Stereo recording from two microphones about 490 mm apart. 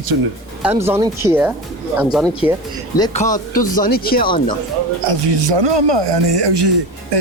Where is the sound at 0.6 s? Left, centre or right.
Centre.